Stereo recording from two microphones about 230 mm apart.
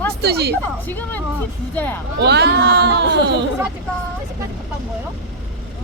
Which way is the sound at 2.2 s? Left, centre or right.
Right.